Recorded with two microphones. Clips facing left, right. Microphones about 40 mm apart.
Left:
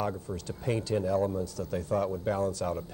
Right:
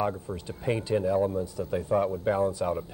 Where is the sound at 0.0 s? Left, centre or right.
Centre.